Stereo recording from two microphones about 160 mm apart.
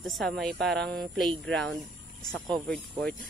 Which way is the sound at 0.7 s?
90° right.